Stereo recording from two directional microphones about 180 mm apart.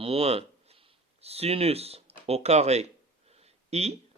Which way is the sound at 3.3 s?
35° right (ahead or behind).